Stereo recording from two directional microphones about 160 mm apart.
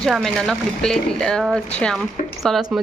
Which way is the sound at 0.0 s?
Centre (ahead or behind).